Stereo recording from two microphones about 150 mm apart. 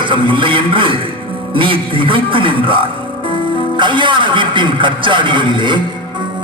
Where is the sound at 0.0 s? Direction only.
35° right (ahead or behind).